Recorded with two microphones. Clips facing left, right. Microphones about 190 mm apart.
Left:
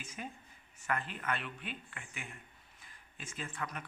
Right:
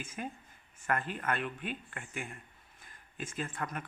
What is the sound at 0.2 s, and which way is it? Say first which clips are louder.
A man's voice: right 4 dB; 45° right (ahead or behind).